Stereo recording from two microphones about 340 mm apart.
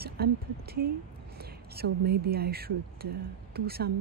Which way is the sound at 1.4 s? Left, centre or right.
Right.